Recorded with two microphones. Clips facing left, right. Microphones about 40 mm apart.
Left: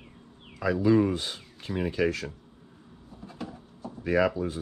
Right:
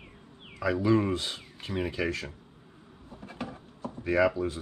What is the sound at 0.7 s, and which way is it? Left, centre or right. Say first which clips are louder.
Speech: left 3 dB; right.